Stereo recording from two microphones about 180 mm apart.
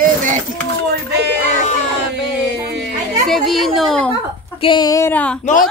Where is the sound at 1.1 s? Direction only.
70° right (ahead or behind).